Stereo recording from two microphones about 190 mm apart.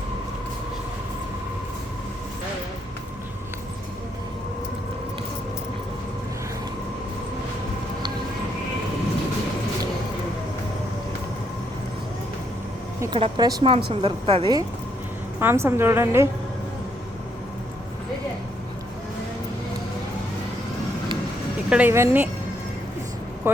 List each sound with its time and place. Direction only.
13.1 s speech: 25° right (ahead or behind)
15.4 s a woman's voice: 10° right (ahead or behind)
21.7 s a woman's voice: 10° right (ahead or behind)